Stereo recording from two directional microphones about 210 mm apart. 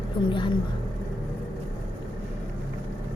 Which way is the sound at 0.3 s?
25° left (ahead or behind).